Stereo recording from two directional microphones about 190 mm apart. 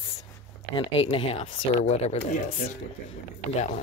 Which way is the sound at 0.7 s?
30° left (ahead or behind).